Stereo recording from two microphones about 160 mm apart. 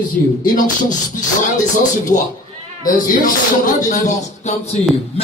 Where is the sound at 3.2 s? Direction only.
55° left (ahead or behind).